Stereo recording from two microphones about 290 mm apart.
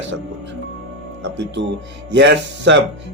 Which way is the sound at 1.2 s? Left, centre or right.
Right.